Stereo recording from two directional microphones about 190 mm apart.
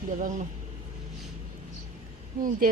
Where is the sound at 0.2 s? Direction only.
40° right (ahead or behind).